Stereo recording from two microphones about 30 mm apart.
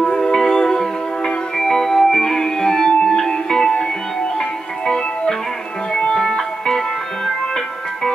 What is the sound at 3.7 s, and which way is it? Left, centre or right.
Music, left.